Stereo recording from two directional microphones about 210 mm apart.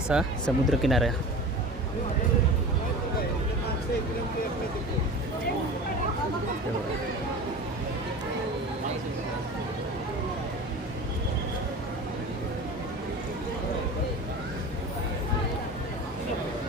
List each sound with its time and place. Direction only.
0.1 s speech: centre (ahead or behind)